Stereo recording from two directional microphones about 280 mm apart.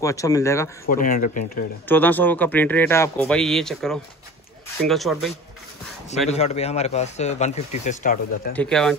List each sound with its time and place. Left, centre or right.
0.0 s speech: centre
0.8 s speech: left
1.9 s speech: centre
6.0 s speech: left
8.5 s speech: centre